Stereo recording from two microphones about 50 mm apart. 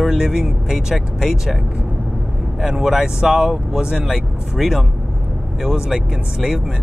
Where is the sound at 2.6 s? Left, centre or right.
Centre.